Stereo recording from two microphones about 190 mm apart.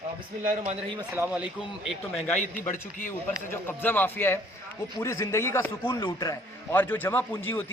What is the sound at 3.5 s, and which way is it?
A man's voice, 10° left (ahead or behind).